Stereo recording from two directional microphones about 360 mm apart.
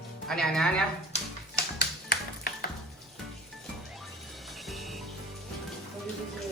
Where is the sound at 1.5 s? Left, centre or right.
Left.